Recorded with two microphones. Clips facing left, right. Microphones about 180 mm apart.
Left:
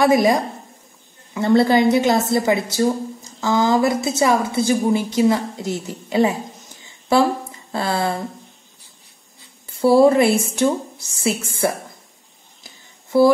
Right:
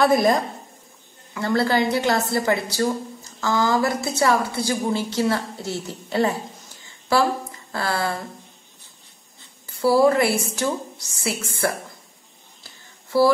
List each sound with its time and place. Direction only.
0.0 s a woman's voice: 15° left (ahead or behind)
6.8 s a sound: 20° left (ahead or behind)
7.7 s a woman's voice: 25° left (ahead or behind)
9.7 s a woman's voice: 25° left (ahead or behind)